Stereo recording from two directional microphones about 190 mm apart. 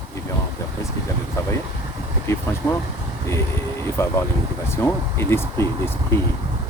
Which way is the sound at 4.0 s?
15° left (ahead or behind).